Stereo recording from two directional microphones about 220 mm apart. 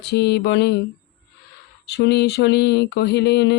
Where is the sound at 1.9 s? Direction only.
50° left (ahead or behind).